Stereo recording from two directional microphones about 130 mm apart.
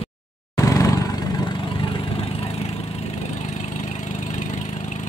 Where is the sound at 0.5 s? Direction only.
25° left (ahead or behind).